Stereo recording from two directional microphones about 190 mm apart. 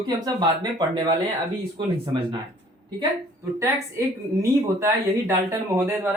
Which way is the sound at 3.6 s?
15° right (ahead or behind).